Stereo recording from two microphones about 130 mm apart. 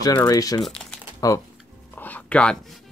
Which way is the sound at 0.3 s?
30° left (ahead or behind).